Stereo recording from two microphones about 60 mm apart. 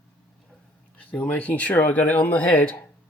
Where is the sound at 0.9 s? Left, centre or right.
Left.